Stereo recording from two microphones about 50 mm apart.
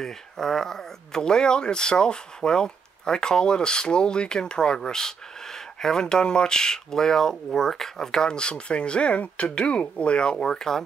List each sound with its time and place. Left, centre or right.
0.0 s speech: centre
10.3 s speech: centre